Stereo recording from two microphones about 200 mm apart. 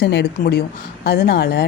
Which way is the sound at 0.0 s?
60° left (ahead or behind).